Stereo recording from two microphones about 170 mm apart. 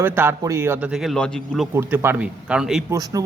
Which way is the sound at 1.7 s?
15° right (ahead or behind).